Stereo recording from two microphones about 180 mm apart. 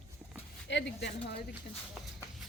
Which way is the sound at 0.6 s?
80° left.